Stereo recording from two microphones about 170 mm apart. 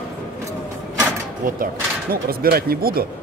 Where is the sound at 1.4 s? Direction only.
60° right (ahead or behind).